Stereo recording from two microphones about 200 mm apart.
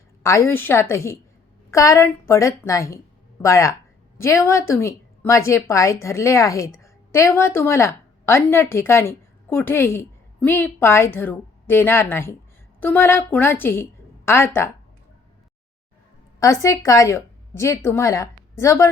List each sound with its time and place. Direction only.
0.2 s a woman's voice: 15° left (ahead or behind)
16.4 s speech: 15° left (ahead or behind)